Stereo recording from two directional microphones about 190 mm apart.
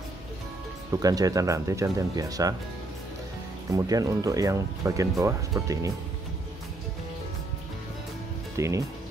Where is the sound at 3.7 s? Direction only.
20° right (ahead or behind).